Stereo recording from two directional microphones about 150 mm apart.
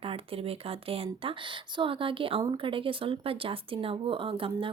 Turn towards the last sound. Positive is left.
turn(degrees=-35)  # may be behind; listen again after turning